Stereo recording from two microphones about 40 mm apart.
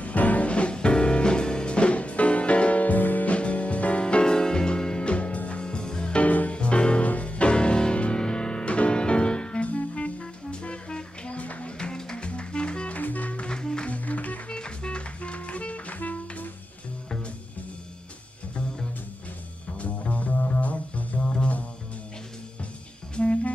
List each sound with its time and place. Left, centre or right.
0.0 s music: left
3.3 s music: left
5.6 s music: left
6.2 s music: left
9.7 s music: left
12.9 s music: left
13.5 s music: centre
13.8 s music: left
14.5 s music: left
19.8 s music: left
23.1 s music: left